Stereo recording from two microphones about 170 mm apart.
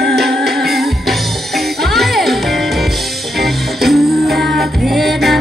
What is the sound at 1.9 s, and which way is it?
Music, centre (ahead or behind).